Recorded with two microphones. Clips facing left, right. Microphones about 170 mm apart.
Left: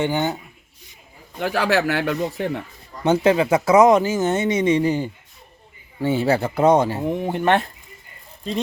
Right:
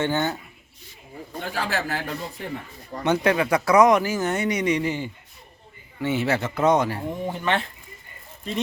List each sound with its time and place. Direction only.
0.0 s speech: 15° left (ahead or behind)
1.4 s speech: 75° left (ahead or behind)
3.0 s speech: 25° left (ahead or behind)
7.3 s speech: 55° left (ahead or behind)